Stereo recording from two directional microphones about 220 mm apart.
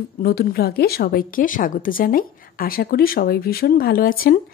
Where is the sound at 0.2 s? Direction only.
45° left (ahead or behind).